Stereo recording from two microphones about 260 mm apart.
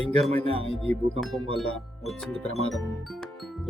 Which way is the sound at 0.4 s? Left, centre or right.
Left.